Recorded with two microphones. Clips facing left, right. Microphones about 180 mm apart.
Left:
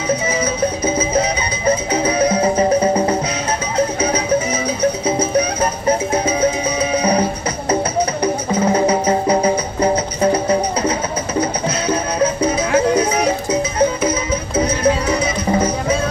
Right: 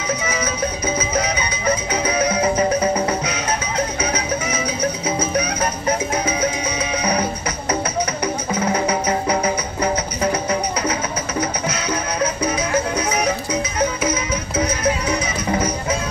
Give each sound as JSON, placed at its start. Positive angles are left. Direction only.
{"t": 0.8, "sound": "music", "side_deg": 30}